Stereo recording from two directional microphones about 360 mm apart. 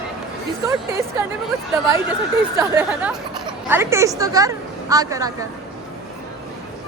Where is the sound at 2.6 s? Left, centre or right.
Centre.